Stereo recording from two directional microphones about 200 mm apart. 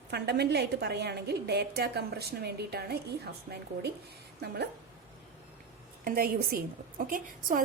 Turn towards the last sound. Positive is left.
turn(degrees=-40)  # may be behind; listen again after turning